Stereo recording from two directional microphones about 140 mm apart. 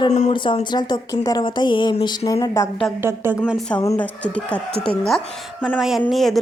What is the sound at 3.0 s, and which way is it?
Speech, 15° right (ahead or behind).